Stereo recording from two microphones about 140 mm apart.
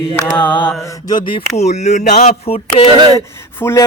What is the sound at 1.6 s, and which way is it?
Speech, 55° left (ahead or behind).